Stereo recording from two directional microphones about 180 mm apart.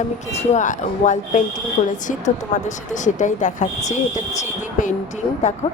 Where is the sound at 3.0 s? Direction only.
45° left (ahead or behind).